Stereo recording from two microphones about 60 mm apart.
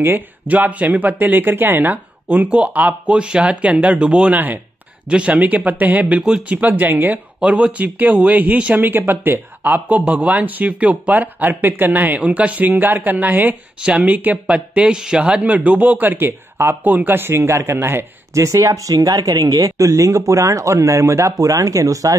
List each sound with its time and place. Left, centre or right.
0.5 s speech: right
7.3 s speech: centre
8.7 s speech: right
13.7 s speech: centre; by 16.7 s right
16.8 s speech: right
18.3 s speech: right